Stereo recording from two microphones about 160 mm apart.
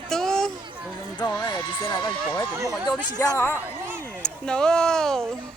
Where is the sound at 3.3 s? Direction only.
15° left (ahead or behind).